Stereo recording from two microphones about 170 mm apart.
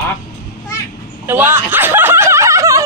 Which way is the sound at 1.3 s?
15° right (ahead or behind).